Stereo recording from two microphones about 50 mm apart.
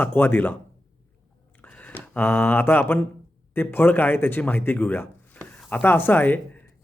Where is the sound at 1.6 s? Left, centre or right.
Left.